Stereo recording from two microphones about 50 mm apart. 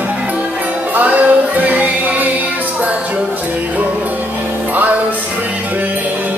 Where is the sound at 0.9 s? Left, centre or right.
Right.